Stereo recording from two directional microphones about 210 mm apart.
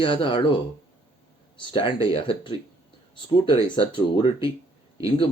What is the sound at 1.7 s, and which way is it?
Speech, 25° left (ahead or behind).